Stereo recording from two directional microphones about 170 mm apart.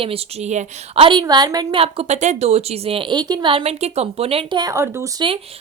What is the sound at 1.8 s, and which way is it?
A woman's voice, 40° right (ahead or behind).